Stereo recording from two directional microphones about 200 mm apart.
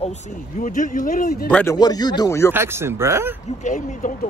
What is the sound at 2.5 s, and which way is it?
Speech, 10° right (ahead or behind).